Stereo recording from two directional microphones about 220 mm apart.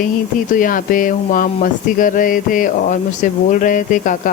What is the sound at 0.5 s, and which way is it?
Speech, 40° left (ahead or behind).